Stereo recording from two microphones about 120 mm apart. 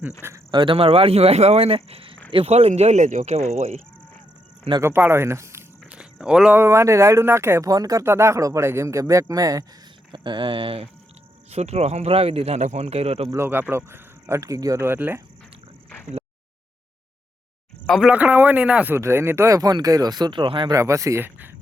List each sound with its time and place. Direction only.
0.2 s speech: 20° right (ahead or behind)
0.5 s speech: 45° right (ahead or behind); by 3.8 s 65° right (ahead or behind)
4.8 s speech: 20° right (ahead or behind)
6.0 s a sound: 5° right (ahead or behind)
6.6 s speech: 25° right (ahead or behind)
10.1 s speech: 40° right (ahead or behind)
11.5 s speech: 60° right (ahead or behind)
13.3 s speech: 20° right (ahead or behind)
17.8 s speech: 5° left (ahead or behind)
18.1 s speech: 15° right (ahead or behind)
18.9 s speech: 20° right (ahead or behind); by 20.7 s 40° right (ahead or behind)
20.7 s speech: 25° right (ahead or behind)